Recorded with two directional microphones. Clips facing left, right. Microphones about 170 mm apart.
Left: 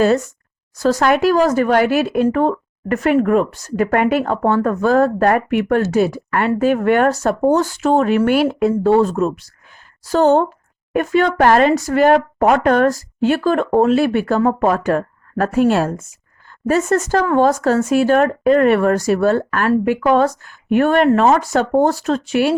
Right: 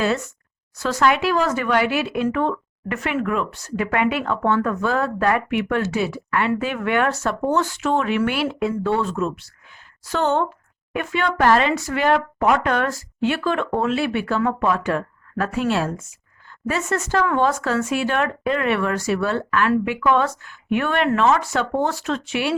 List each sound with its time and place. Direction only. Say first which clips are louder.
0.0 s speech: left 7 dB; 40° left (ahead or behind)